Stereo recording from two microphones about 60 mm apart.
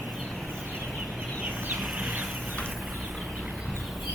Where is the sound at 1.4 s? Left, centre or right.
Right.